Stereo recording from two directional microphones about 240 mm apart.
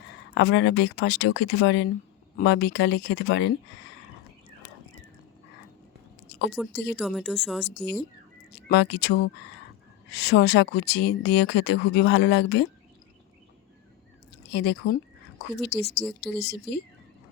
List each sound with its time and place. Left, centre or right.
0.3 s speech: left
6.5 s speech: centre
8.5 s speech: left
14.5 s speech: left